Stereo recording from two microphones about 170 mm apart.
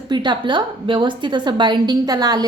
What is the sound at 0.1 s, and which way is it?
A woman's voice, 25° right (ahead or behind).